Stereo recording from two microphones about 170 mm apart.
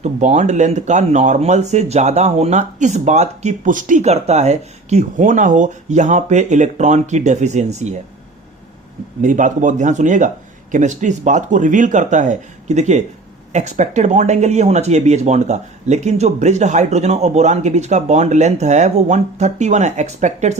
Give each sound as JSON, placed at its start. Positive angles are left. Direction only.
{"t": 0.0, "sound": "speech", "side_deg": -45}
{"t": 9.2, "sound": "speech", "side_deg": -50}